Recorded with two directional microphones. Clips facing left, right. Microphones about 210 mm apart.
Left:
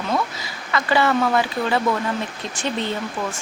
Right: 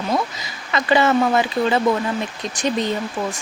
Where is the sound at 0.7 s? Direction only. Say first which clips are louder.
Right 2 dB; 20° right (ahead or behind).